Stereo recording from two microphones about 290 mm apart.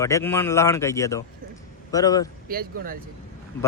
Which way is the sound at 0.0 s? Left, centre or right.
Centre.